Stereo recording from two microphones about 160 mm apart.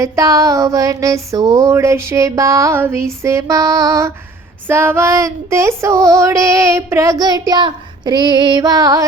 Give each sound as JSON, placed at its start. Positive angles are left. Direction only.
{"t": 0.0, "sound": "female singing", "side_deg": -20}